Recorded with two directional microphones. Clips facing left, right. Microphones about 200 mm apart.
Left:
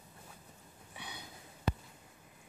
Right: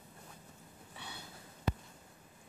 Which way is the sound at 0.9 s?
15° left (ahead or behind).